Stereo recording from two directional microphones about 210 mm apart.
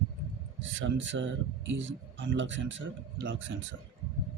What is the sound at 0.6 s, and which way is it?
Speech, 60° right (ahead or behind).